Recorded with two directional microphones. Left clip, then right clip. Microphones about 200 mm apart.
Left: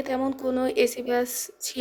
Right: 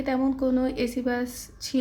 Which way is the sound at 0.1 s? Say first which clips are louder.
Right 2 dB; 35° left (ahead or behind).